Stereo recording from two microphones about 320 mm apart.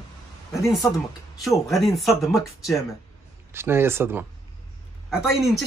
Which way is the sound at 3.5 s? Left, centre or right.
Centre.